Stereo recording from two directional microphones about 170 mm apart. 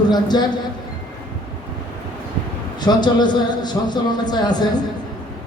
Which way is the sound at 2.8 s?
25° left (ahead or behind).